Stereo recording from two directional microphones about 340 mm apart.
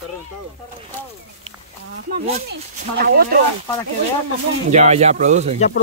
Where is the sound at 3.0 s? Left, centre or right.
Right.